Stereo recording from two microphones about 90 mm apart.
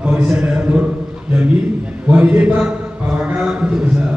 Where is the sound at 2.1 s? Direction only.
15° right (ahead or behind).